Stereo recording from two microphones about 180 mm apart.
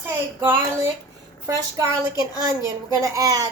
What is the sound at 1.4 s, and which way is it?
A woman's voice, 20° right (ahead or behind).